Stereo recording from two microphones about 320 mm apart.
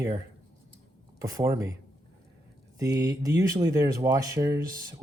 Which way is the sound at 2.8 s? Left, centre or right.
Centre.